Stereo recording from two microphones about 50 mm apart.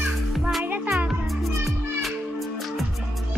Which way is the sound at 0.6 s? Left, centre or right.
Right.